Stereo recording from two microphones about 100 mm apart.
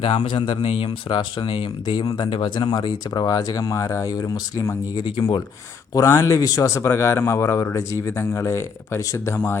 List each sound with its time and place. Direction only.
0.0 s speech: 60° left (ahead or behind)
2.0 s speech: 45° left (ahead or behind)
5.9 s speech: 35° left (ahead or behind)